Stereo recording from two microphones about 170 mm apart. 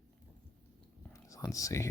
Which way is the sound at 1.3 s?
20° left (ahead or behind).